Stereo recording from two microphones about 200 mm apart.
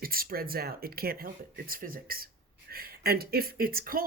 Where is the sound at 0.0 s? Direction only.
45° right (ahead or behind).